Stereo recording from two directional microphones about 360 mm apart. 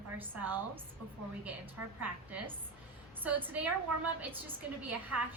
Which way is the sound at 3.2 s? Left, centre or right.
Centre.